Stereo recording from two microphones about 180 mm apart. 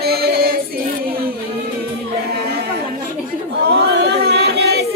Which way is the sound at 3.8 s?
65° right (ahead or behind).